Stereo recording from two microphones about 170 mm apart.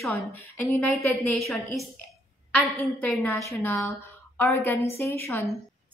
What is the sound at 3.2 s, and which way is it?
A woman's voice, 15° left (ahead or behind).